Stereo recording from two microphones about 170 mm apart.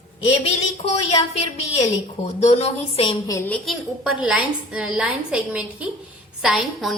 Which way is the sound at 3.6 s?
Centre (ahead or behind).